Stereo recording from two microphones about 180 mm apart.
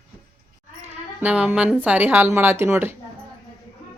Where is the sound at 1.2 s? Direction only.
10° right (ahead or behind).